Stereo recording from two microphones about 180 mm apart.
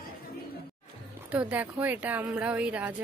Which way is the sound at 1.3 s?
10° right (ahead or behind).